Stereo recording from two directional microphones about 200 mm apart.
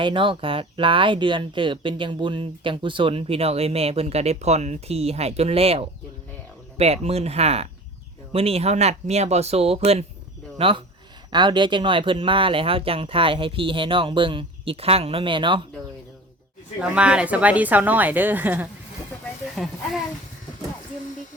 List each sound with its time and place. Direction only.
0.0 s speech: 25° right (ahead or behind)
16.9 s a woman's voice: 5° right (ahead or behind)